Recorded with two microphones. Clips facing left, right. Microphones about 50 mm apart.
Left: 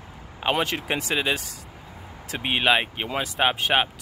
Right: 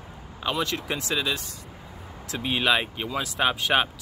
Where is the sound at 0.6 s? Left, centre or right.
Left.